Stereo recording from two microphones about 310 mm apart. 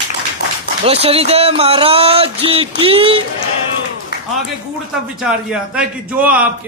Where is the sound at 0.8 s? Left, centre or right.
Centre.